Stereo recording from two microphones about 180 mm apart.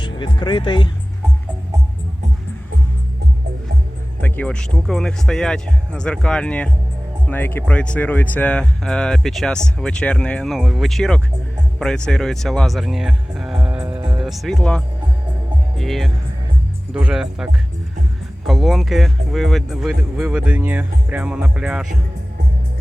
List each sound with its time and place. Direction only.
0.0 s speech: 25° left (ahead or behind)
4.2 s speech: 5° left (ahead or behind)